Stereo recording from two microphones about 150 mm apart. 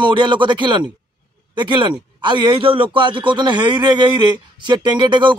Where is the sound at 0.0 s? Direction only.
30° right (ahead or behind).